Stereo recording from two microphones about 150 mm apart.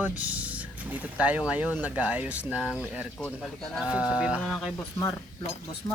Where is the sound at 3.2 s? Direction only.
5° left (ahead or behind).